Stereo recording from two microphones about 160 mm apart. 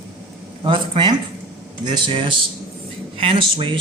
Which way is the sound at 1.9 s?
30° right (ahead or behind).